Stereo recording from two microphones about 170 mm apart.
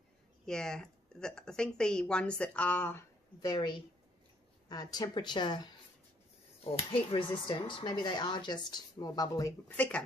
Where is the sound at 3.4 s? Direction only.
25° left (ahead or behind).